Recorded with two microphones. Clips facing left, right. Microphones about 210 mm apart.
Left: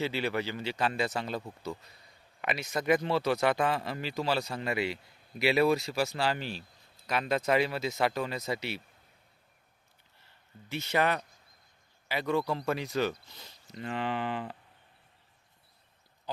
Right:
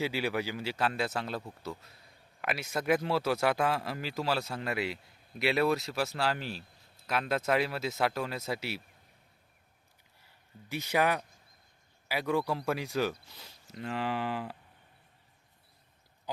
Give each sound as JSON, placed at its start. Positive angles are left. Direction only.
{"t": 0.0, "sound": "speech", "side_deg": -10}
{"t": 10.7, "sound": "speech", "side_deg": -10}